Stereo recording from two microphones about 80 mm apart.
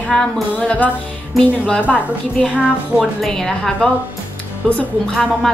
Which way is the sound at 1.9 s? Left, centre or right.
Centre.